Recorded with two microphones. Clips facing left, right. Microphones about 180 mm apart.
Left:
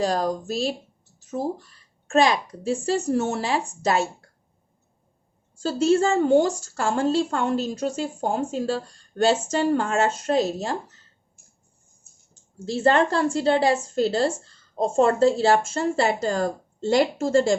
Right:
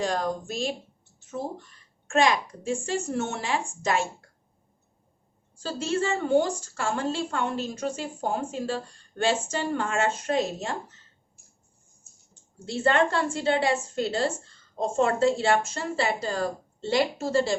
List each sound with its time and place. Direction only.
0.0 s a woman's voice: 35° left (ahead or behind)
2.0 s a woman's voice: 35° left (ahead or behind)
5.5 s a woman's voice: 40° left (ahead or behind)
12.8 s a woman's voice: 35° left (ahead or behind)